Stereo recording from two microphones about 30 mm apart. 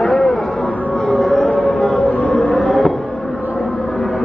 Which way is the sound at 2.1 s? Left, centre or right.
Left.